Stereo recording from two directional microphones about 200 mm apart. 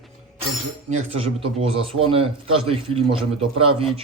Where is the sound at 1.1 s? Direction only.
25° right (ahead or behind).